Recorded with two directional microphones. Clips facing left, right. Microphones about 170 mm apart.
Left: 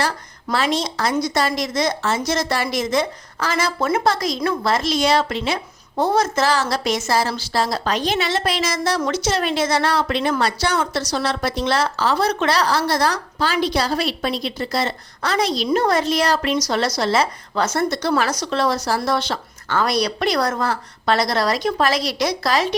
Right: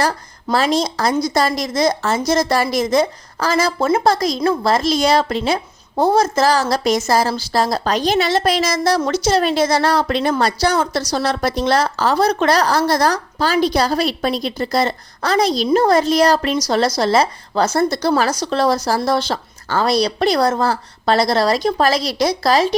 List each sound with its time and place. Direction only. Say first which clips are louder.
0.5 s speech: right 4 dB; 40° right (ahead or behind)